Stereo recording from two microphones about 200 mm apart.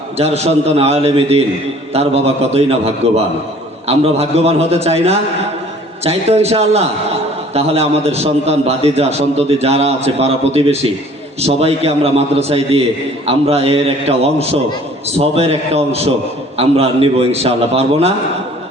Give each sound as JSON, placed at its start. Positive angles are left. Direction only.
{"t": 0.2, "sound": "a man's voice", "side_deg": -30}